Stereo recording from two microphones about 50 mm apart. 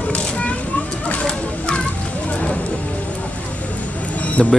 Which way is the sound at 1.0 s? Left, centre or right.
Centre.